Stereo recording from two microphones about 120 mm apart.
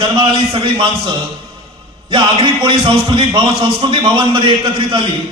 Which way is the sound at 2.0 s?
45° right (ahead or behind).